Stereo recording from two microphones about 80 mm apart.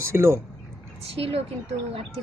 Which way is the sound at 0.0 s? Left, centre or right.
Right.